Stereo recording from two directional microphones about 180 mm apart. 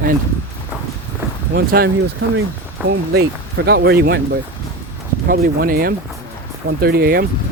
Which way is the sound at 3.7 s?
65° right (ahead or behind).